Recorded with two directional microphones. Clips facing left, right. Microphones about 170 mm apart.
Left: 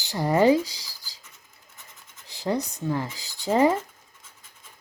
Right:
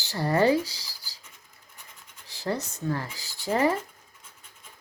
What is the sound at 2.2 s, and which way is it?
Speech, 15° left (ahead or behind).